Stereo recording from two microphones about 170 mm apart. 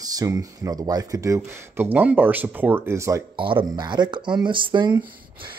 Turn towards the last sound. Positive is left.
turn(degrees=-30)  # may be behind; listen again after turning